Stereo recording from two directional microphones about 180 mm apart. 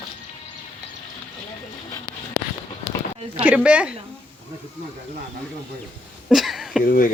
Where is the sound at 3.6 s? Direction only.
5° right (ahead or behind).